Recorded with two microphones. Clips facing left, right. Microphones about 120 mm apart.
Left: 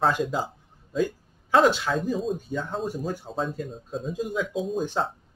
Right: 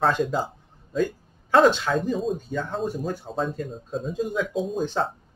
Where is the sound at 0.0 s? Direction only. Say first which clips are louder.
Right 2 dB; 5° left (ahead or behind).